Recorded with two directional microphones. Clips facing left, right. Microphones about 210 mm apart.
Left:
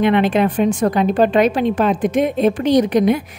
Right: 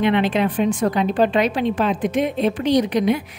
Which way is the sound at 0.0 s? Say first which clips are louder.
Left 3 dB; 50° left (ahead or behind).